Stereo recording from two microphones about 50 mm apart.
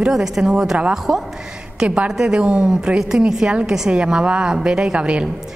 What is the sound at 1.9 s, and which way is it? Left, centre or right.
A woman's voice, right.